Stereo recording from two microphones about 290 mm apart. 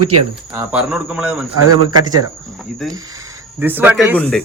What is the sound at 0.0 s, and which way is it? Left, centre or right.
Speech, right.